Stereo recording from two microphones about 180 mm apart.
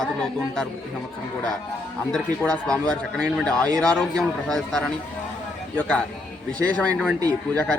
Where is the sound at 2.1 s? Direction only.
5° left (ahead or behind).